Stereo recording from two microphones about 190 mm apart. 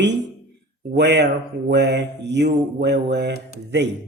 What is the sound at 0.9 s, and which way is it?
Speech, 65° right (ahead or behind).